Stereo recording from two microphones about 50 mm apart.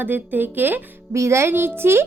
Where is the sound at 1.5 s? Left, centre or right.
Right.